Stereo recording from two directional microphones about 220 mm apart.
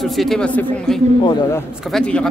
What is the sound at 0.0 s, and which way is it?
A man's voice, centre (ahead or behind).